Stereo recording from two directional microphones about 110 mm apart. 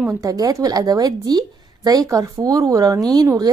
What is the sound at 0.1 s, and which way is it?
A woman's voice, 30° right (ahead or behind).